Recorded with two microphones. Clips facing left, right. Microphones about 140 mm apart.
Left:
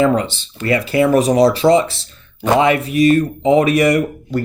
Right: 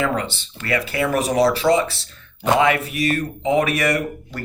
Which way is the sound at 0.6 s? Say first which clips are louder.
Left 7 dB; 25° left (ahead or behind).